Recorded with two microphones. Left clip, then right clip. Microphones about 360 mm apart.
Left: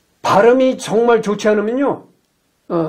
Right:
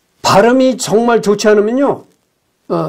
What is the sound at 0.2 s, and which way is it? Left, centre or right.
A man's voice, right.